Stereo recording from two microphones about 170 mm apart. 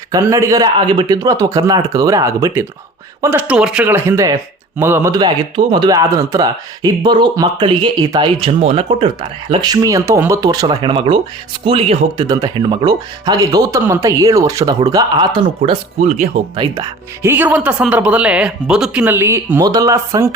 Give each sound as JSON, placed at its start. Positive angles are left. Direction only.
{"t": 0.1, "sound": "a man's voice", "side_deg": -20}
{"t": 16.7, "sound": "speech", "side_deg": -15}